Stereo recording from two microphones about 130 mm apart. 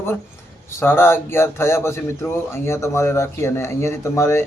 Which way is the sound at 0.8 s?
20° left (ahead or behind).